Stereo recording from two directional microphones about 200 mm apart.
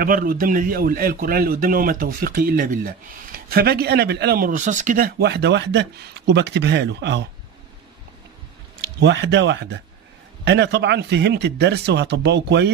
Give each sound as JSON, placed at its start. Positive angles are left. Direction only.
{"t": 0.0, "sound": "a man's voice", "side_deg": -45}
{"t": 8.8, "sound": "a man's voice", "side_deg": -60}